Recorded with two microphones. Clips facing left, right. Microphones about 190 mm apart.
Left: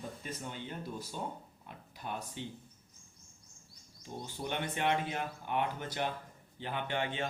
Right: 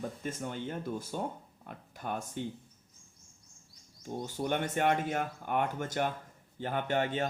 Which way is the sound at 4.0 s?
45° right (ahead or behind).